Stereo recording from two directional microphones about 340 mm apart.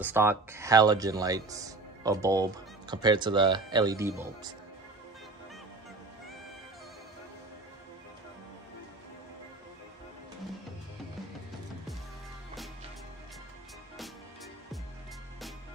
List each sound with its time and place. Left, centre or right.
0.0 s speech: centre